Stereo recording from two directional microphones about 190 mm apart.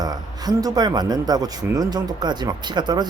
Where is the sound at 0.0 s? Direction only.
20° right (ahead or behind).